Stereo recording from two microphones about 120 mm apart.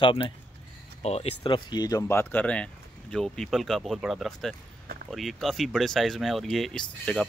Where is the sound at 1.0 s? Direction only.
60° left (ahead or behind).